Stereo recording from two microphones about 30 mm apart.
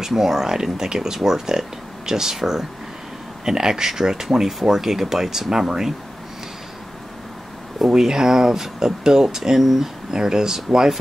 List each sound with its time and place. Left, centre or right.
0.0 s speech: centre
8.0 s speech: centre